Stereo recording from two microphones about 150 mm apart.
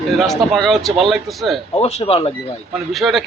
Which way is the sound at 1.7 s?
45° left (ahead or behind).